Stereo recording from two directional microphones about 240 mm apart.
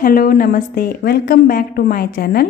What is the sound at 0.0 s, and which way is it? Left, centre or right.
A woman's voice, left.